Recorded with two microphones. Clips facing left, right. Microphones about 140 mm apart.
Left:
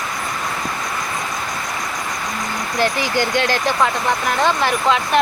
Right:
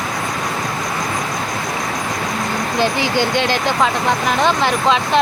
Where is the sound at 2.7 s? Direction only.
20° right (ahead or behind).